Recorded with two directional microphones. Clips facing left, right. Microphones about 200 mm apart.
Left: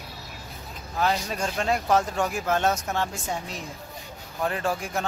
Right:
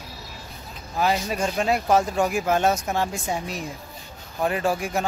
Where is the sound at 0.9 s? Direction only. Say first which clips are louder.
Right 3 dB; 10° right (ahead or behind).